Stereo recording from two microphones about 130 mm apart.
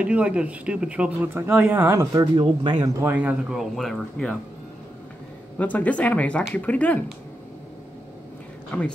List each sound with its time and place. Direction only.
0.0 s speech: 10° right (ahead or behind)
2.3 s speech: 35° right (ahead or behind)
3.0 s speech: 10° right (ahead or behind); by 4.4 s 5° left (ahead or behind)
5.6 s speech: 10° left (ahead or behind)